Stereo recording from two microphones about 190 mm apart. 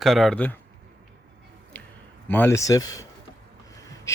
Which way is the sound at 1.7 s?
10° left (ahead or behind).